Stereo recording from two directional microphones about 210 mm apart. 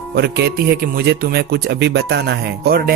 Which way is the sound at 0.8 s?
50° right (ahead or behind).